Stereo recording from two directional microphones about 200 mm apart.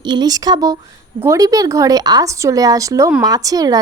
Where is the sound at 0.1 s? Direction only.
20° right (ahead or behind).